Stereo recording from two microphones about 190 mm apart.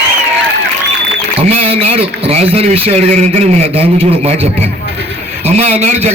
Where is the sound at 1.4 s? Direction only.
30° right (ahead or behind).